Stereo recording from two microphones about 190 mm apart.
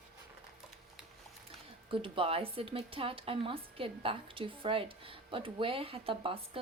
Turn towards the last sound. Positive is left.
turn(degrees=-30)  # may be behind; listen again after turning